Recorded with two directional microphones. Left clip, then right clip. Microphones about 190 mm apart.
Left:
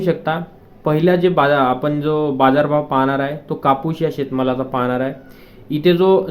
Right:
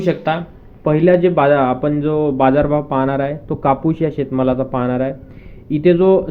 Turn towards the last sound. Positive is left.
turn(degrees=0)  # may be behind; listen again after turning